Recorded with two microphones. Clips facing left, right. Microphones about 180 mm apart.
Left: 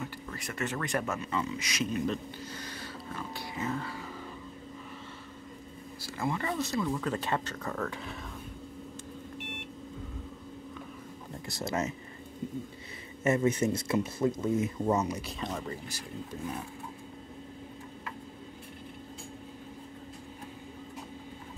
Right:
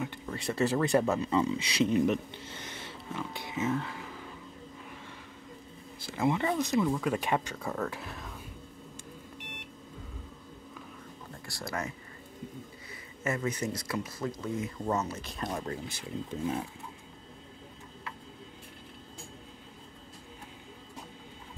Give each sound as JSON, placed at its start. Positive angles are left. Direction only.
{"t": 0.0, "sound": "speech", "side_deg": -25}
{"t": 6.0, "sound": "speech", "side_deg": -20}
{"t": 11.4, "sound": "speech", "side_deg": 20}
{"t": 13.2, "sound": "speech", "side_deg": 25}
{"t": 15.3, "sound": "speech", "side_deg": -10}
{"t": 16.0, "sound": "speech", "side_deg": -25}